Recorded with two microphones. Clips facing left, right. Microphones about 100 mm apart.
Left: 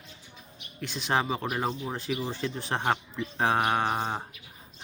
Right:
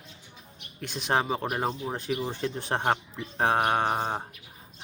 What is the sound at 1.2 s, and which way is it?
Speech, 40° right (ahead or behind).